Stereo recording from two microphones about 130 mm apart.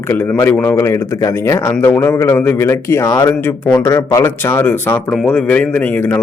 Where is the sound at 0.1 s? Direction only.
15° left (ahead or behind).